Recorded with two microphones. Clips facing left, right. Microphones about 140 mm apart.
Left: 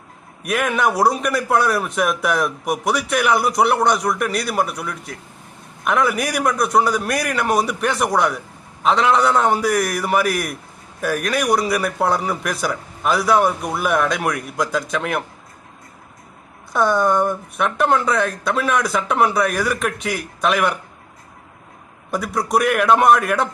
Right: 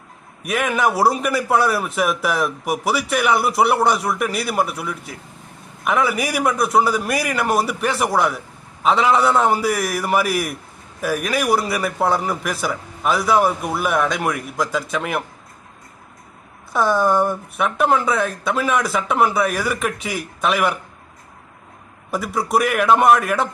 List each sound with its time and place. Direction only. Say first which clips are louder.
0.4 s a man's voice: even; centre (ahead or behind)
16.7 s a man's voice: even; centre (ahead or behind)
22.1 s a man's voice: even; centre (ahead or behind)